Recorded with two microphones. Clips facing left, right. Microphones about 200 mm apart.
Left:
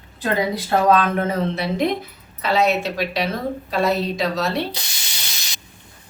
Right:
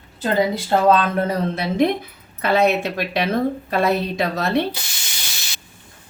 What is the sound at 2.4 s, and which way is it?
A woman's voice, 55° right (ahead or behind).